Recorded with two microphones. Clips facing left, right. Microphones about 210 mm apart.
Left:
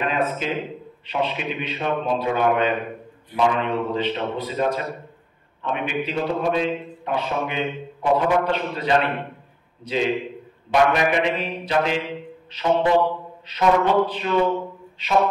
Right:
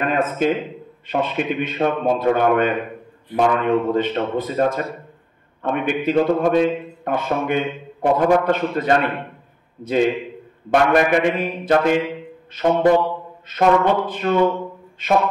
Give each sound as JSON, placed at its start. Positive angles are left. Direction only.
{"t": 0.0, "sound": "a man's voice", "side_deg": -50}
{"t": 10.7, "sound": "a man's voice", "side_deg": -50}